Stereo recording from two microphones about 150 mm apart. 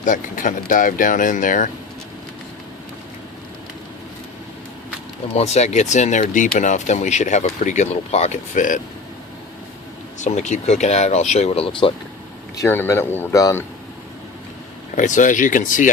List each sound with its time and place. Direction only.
0.0 s speech: 60° left (ahead or behind)
5.3 s speech: 45° left (ahead or behind)
10.2 s speech: 50° left (ahead or behind); by 11.9 s 35° left (ahead or behind)
12.5 s speech: 15° left (ahead or behind)
14.9 s speech: 55° left (ahead or behind)